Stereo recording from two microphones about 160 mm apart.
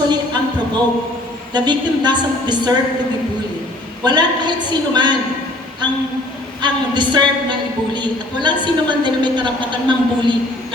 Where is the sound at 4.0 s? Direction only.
25° right (ahead or behind).